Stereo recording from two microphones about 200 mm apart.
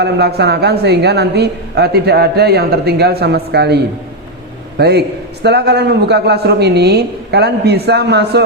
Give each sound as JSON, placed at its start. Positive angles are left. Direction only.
{"t": 0.0, "sound": "a woman's voice", "side_deg": -55}
{"t": 4.8, "sound": "a man's voice", "side_deg": -55}